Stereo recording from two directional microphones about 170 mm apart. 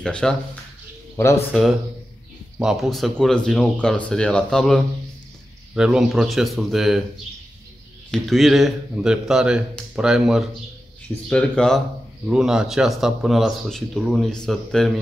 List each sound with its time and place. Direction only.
0.0 s speech: 5° left (ahead or behind)
1.1 s speech: 20° left (ahead or behind)
2.6 s speech: centre (ahead or behind)
8.1 s speech: centre (ahead or behind)